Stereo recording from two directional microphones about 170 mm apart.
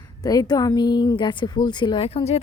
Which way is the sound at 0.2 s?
20° left (ahead or behind).